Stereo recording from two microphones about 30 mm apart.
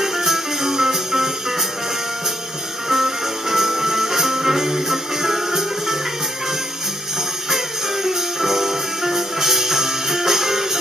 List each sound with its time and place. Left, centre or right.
0.0 s music: centre
2.9 s music: centre
7.5 s music: centre